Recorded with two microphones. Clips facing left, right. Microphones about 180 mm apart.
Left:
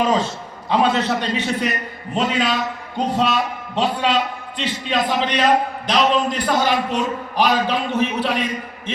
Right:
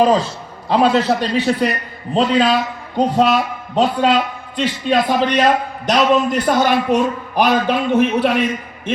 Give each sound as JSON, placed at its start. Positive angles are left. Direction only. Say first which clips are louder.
{"t": 0.0, "sound": "a man's voice", "louder": "right 5 dB", "side_deg": -35}
{"t": 3.8, "sound": "a man's voice", "louder": "right 5 dB", "side_deg": -45}